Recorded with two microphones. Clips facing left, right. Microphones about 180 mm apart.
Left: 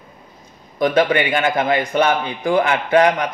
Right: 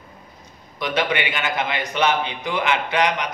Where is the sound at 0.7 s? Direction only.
50° left (ahead or behind).